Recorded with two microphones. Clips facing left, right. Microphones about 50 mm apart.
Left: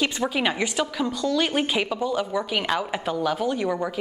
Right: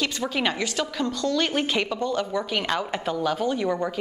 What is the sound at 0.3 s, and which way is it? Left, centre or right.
A woman's voice, centre.